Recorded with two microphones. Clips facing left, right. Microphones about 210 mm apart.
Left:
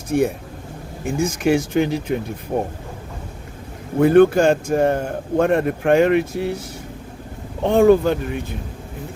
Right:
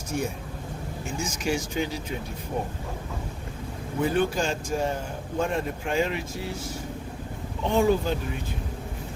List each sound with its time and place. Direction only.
0.1 s a man's voice: 65° left (ahead or behind)
3.9 s a man's voice: 60° left (ahead or behind)
7.6 s a man's voice: 60° left (ahead or behind)